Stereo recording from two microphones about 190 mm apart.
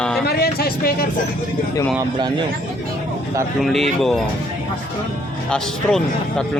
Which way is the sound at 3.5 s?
Centre (ahead or behind).